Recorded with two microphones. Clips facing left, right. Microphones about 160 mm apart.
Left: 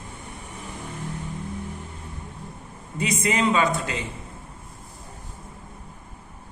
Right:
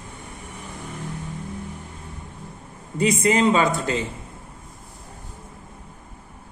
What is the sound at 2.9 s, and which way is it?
Speech, 35° right (ahead or behind).